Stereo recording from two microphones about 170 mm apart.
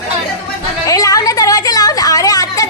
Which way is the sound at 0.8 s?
20° left (ahead or behind).